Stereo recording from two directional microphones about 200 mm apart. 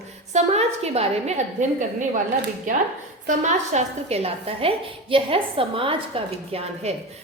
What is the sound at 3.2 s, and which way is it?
A woman's voice, 35° right (ahead or behind).